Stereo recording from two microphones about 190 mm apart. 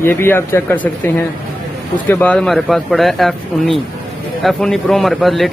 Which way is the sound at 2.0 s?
10° left (ahead or behind).